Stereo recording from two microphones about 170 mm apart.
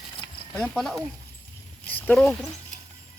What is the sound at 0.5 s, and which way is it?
Speech, 5° left (ahead or behind).